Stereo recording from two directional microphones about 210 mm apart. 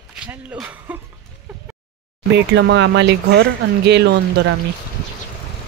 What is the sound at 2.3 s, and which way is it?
Speech, 55° right (ahead or behind).